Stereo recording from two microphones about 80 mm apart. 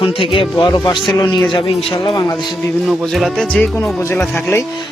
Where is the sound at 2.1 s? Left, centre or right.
Left.